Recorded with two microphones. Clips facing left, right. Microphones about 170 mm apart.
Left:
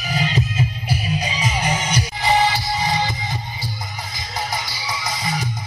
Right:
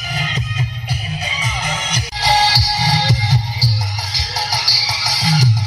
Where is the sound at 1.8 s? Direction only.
85° right.